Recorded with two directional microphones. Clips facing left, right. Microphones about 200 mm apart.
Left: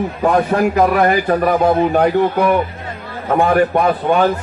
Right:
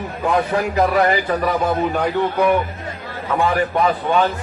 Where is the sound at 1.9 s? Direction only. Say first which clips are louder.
Left 5 dB; 65° left (ahead or behind).